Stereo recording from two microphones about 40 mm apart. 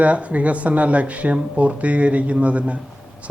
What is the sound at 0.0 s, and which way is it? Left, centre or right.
Speech, right.